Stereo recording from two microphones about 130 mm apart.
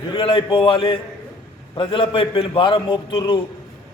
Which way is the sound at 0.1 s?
40° left (ahead or behind).